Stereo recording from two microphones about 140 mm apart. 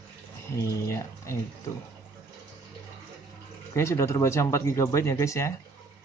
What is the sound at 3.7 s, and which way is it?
Speech, 20° left (ahead or behind).